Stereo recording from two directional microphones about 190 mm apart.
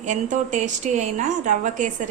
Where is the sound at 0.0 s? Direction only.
40° right (ahead or behind).